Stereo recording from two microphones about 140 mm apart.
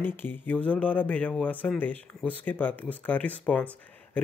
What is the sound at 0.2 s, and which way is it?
Speech, 15° left (ahead or behind).